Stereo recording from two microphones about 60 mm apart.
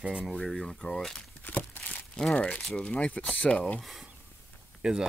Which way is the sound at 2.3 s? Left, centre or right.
Left.